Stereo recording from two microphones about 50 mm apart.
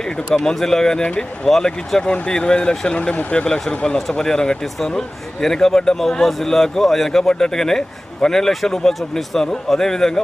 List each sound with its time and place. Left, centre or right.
0.5 s a man's voice: centre; by 3.4 s left
3.8 s a man's voice: centre